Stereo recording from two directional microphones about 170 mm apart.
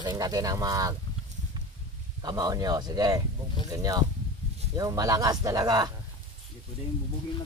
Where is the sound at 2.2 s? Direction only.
20° right (ahead or behind).